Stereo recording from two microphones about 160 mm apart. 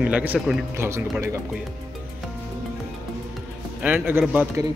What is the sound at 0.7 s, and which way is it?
Speech, 15° right (ahead or behind).